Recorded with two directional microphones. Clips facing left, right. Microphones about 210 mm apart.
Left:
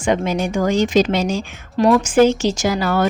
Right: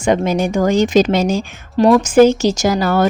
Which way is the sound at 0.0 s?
40° right (ahead or behind).